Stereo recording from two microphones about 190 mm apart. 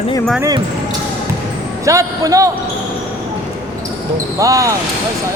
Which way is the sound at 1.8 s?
15° right (ahead or behind).